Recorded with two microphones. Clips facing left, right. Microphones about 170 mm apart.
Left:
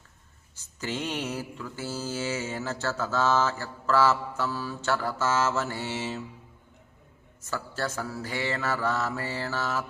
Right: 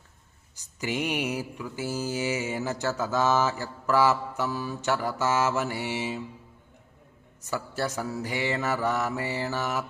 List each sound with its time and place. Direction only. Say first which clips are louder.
0.5 s mantra: right 3 dB; 15° right (ahead or behind)
7.4 s mantra: right 2 dB; 15° right (ahead or behind)